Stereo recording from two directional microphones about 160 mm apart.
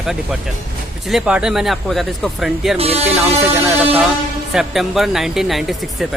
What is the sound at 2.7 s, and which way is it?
Speech, 40° right (ahead or behind).